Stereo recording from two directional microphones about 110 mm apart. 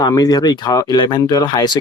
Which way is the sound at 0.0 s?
35° left (ahead or behind).